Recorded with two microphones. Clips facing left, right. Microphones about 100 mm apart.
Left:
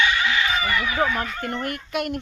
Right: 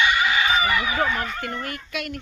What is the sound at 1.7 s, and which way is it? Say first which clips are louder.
Speech: left 5 dB; 50° left (ahead or behind).